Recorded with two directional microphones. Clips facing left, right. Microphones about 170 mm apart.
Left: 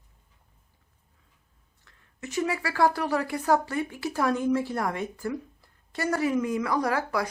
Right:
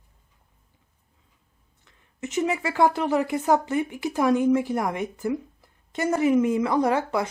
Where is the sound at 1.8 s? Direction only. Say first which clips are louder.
Right 5 dB; 20° right (ahead or behind).